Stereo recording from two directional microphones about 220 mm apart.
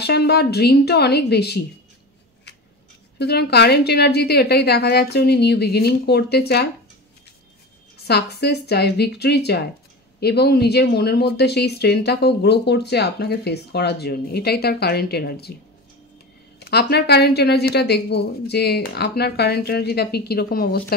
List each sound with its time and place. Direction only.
0.0 s speech: 45° left (ahead or behind)
3.2 s speech: 45° left (ahead or behind)
8.0 s speech: 50° left (ahead or behind)
16.5 s speech: 45° left (ahead or behind)